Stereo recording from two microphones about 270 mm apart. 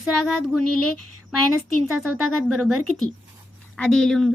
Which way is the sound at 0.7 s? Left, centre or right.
Right.